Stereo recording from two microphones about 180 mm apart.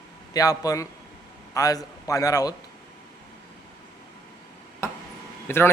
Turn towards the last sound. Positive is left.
turn(degrees=10)  # may be behind; listen again after turning